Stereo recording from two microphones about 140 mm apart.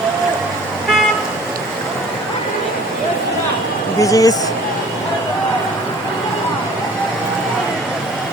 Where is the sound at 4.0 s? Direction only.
25° left (ahead or behind).